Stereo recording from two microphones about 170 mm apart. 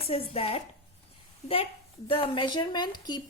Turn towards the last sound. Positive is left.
turn(degrees=25)  # may be behind; listen again after turning